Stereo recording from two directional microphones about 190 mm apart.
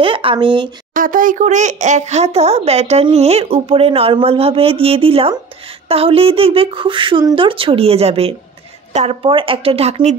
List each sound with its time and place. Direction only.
0.0 s speech: 30° right (ahead or behind)
0.9 s speech: 45° right (ahead or behind)